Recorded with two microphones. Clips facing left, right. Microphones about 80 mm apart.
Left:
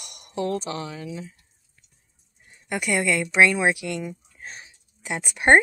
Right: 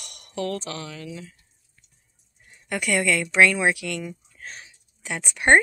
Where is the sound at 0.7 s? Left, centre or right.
Left.